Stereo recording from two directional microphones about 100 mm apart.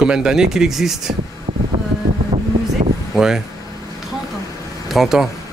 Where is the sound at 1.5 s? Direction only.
90° right.